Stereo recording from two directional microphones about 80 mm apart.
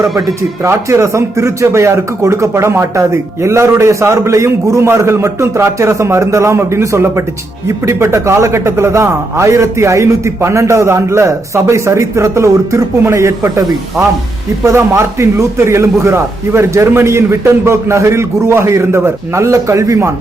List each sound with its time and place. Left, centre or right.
0.6 s a man's voice: right